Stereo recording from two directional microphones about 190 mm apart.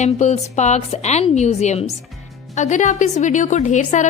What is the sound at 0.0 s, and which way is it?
A woman's voice, 40° left (ahead or behind).